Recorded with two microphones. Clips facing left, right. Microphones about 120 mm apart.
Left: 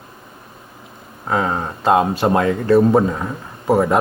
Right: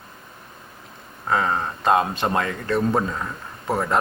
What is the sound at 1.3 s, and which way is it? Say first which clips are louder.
Speech: left 2 dB; 15° left (ahead or behind).